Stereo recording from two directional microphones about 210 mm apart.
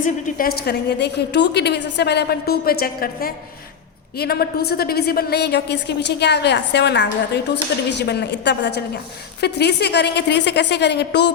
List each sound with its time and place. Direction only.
0.0 s a woman's voice: 45° left (ahead or behind)